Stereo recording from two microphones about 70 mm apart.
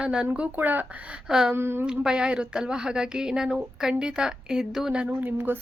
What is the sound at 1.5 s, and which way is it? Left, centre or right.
Speech, right.